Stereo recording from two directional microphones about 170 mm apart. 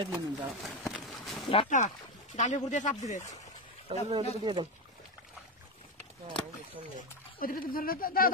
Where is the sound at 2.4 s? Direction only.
45° left (ahead or behind).